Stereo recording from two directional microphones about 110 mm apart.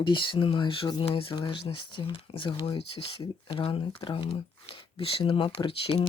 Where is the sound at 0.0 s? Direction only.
50° left (ahead or behind).